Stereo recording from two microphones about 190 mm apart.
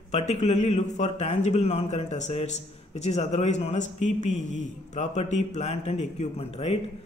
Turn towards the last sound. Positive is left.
turn(degrees=30)  # may be behind; listen again after turning